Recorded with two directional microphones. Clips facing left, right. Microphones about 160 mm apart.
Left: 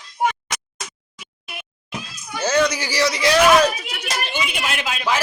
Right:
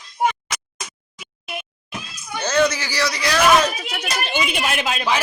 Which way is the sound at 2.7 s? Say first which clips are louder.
Left 3 dB; 15° left (ahead or behind).